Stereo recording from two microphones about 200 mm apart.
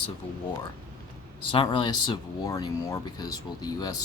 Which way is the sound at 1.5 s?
25° left (ahead or behind).